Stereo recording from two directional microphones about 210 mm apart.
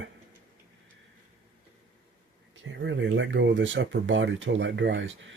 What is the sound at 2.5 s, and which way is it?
Speech, 65° right (ahead or behind).